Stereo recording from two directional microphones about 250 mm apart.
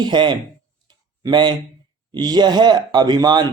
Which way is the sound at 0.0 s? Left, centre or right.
Centre.